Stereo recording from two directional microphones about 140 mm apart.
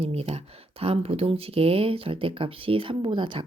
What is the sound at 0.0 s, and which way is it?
Speech, 45° right (ahead or behind).